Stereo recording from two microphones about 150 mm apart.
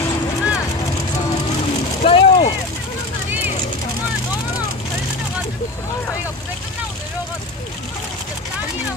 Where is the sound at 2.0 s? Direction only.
40° left (ahead or behind).